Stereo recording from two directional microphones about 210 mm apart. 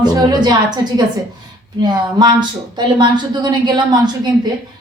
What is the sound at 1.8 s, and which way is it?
A woman's voice, 20° right (ahead or behind).